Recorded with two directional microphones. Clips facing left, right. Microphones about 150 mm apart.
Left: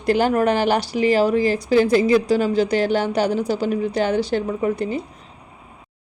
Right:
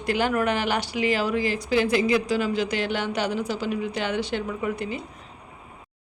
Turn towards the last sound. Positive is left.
turn(degrees=40)  # may be behind; listen again after turning